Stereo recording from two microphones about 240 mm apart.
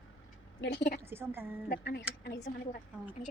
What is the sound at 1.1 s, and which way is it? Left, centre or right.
Speech, centre.